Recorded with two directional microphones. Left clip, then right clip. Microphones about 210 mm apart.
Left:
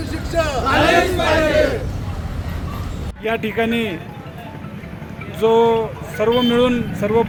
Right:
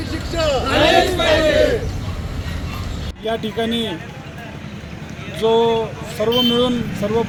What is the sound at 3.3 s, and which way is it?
Speech, 5° right (ahead or behind).